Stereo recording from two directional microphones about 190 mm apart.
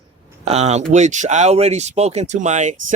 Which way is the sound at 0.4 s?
35° right (ahead or behind).